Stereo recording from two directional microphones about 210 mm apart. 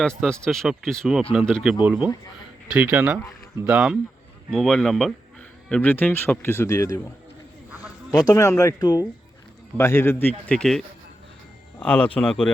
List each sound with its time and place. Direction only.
0.2 s a man's voice: 5° left (ahead or behind)
8.2 s a man's voice: 15° left (ahead or behind)